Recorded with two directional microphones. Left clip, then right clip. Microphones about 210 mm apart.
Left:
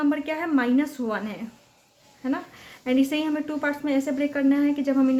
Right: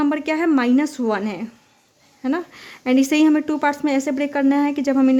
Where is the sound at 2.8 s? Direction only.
50° right (ahead or behind).